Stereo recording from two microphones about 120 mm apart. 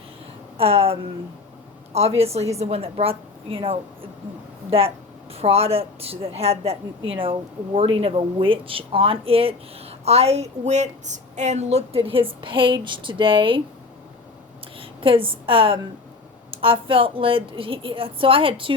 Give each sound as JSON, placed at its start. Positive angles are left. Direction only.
{"t": 0.5, "sound": "a sound", "side_deg": -55}
{"t": 1.9, "sound": "a woman's voice", "side_deg": -55}
{"t": 5.3, "sound": "a woman's voice", "side_deg": -55}
{"t": 10.1, "sound": "a woman's voice", "side_deg": -60}
{"t": 14.8, "sound": "a woman's voice", "side_deg": -45}